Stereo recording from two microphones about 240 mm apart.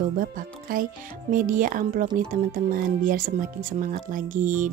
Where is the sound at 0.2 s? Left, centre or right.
Right.